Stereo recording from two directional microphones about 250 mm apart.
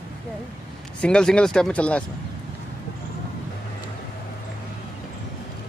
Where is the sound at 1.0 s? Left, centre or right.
Centre.